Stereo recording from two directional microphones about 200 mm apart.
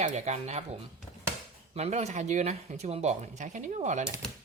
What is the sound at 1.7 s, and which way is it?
A man's voice, 35° right (ahead or behind).